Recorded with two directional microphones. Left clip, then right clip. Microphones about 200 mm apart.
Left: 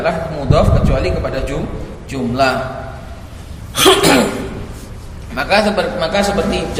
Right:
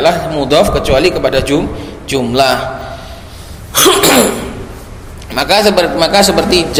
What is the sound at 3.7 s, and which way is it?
Cough, 40° right (ahead or behind).